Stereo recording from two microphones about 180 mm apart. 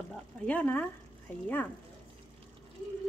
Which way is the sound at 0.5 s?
10° left (ahead or behind).